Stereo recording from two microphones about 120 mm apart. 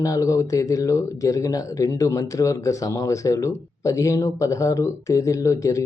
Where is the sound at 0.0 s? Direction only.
30° left (ahead or behind).